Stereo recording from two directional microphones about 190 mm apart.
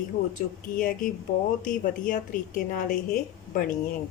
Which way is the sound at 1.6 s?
45° left (ahead or behind).